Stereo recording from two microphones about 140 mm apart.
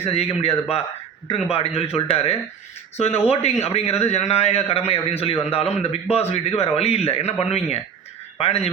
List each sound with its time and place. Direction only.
0.0 s a man's voice: 45° left (ahead or behind)